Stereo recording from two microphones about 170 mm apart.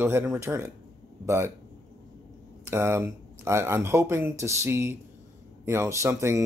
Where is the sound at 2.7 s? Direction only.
15° right (ahead or behind).